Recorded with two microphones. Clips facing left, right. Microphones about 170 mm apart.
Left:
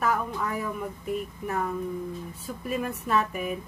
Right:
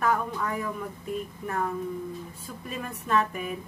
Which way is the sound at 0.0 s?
5° left (ahead or behind).